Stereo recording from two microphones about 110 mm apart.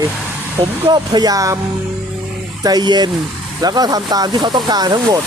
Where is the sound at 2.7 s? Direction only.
40° right (ahead or behind).